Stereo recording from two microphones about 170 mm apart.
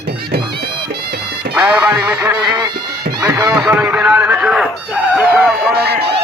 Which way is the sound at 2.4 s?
25° right (ahead or behind).